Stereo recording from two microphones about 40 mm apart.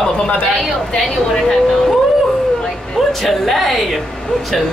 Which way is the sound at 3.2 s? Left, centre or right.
Centre.